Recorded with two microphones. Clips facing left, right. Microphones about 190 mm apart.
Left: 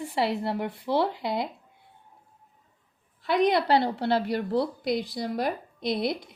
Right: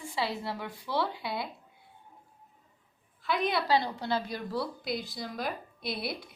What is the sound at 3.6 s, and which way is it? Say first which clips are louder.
A woman's voice: left 5 dB; 65° left (ahead or behind).